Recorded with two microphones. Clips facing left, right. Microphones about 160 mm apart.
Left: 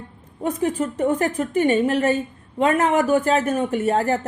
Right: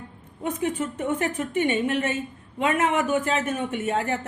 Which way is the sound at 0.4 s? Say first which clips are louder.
Left 4 dB; 35° left (ahead or behind).